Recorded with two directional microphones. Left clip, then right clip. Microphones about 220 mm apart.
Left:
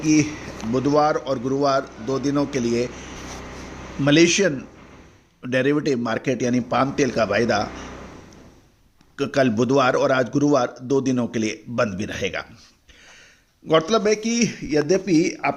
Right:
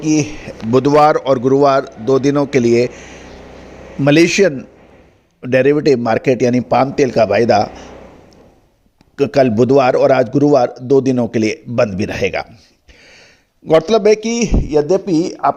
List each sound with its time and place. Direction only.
0.0 s a man's voice: 25° right (ahead or behind)
9.1 s a man's voice: 25° right (ahead or behind)
13.7 s a man's voice: 25° right (ahead or behind)